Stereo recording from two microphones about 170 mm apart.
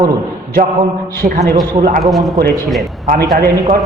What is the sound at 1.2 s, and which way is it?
Speech, 60° right (ahead or behind).